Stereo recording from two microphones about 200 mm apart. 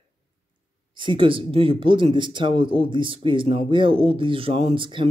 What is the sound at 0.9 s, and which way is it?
Speech, 25° right (ahead or behind).